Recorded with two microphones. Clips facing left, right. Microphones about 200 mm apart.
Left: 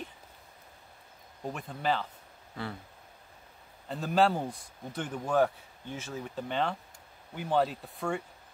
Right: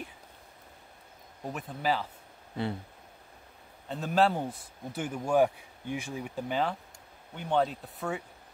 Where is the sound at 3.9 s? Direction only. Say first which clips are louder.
Even; centre (ahead or behind).